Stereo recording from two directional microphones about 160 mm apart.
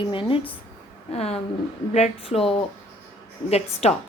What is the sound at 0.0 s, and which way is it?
Speech, 30° left (ahead or behind).